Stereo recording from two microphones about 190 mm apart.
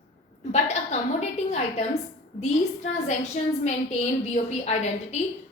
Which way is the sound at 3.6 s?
35° left (ahead or behind).